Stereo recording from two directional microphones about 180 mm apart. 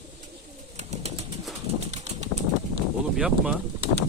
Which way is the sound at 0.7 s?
35° right (ahead or behind).